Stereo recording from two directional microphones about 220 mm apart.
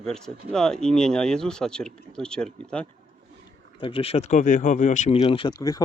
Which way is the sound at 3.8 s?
25° left (ahead or behind).